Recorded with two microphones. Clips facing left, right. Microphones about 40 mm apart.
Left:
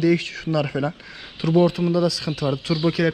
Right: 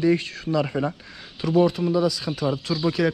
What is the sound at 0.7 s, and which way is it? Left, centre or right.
Speech, centre.